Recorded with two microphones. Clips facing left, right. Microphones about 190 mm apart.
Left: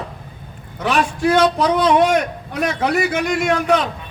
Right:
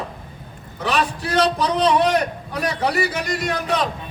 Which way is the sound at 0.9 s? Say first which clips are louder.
Left 5 dB; 35° right (ahead or behind).